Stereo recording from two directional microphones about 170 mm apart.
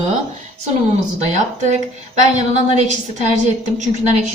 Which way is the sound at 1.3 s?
45° right (ahead or behind).